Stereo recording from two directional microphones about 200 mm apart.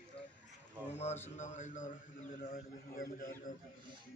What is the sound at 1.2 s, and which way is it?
A man's voice, 35° left (ahead or behind).